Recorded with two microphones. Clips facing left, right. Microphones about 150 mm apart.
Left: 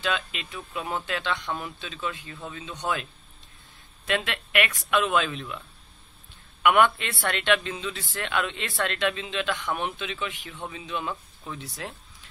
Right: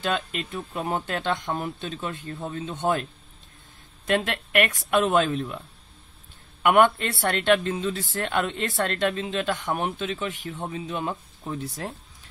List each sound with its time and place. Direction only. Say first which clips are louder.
0.0 s speech: right 2 dB; 45° right (ahead or behind)
4.1 s speech: right 4 dB; 45° right (ahead or behind)
6.6 s speech: right 2 dB; 45° right (ahead or behind)